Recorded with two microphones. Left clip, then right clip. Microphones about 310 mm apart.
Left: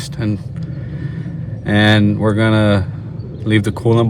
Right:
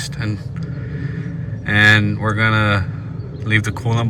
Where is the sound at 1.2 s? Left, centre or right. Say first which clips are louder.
Left 1 dB; centre.